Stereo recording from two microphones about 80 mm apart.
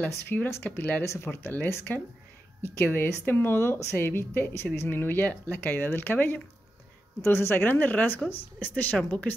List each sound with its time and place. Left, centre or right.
0.1 s speech: left
1.0 s speech: left